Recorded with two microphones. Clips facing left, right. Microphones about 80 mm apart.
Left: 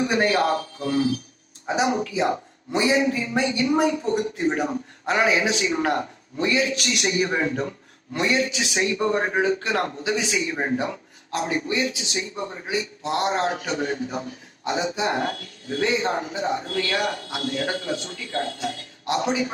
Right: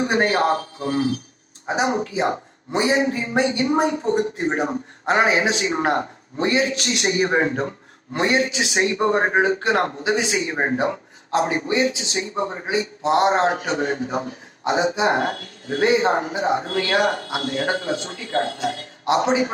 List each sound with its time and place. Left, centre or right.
0.0 s a man's voice: right
13.5 s a man's voice: right